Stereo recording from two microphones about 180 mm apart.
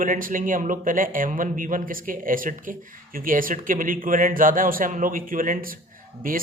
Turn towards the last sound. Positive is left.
turn(degrees=-50)  # may be behind; listen again after turning